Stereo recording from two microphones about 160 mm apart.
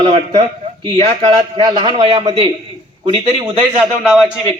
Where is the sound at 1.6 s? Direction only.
25° right (ahead or behind).